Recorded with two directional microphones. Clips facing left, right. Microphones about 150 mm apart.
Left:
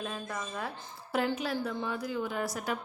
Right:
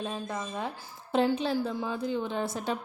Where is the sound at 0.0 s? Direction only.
25° right (ahead or behind).